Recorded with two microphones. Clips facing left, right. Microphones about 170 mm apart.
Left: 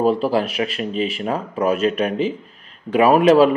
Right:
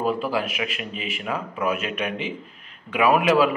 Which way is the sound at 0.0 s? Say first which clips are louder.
Left 6 dB; 35° left (ahead or behind).